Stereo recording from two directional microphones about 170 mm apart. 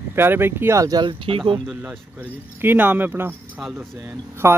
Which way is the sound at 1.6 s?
5° right (ahead or behind).